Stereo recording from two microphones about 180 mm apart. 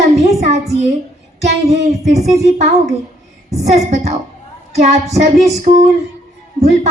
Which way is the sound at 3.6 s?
40° right (ahead or behind).